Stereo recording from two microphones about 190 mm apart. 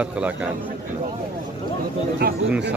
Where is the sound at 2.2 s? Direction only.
55° right (ahead or behind).